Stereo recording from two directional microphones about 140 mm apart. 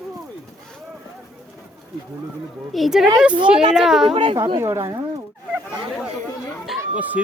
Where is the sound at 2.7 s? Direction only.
Centre (ahead or behind).